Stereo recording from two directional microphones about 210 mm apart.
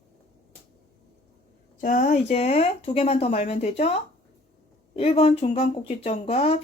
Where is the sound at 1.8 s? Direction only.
35° left (ahead or behind).